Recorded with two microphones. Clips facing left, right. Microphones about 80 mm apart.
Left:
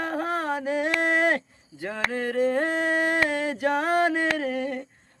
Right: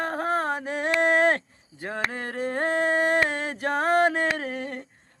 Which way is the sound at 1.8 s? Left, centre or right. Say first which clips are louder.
Left 2 dB; right.